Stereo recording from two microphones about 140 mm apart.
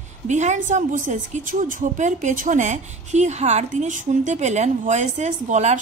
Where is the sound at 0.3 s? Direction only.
55° right (ahead or behind).